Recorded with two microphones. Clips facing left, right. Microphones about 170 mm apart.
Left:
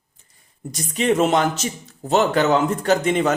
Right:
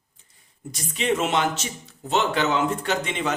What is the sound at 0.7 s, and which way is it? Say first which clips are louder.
Speech: left 5 dB; 40° left (ahead or behind).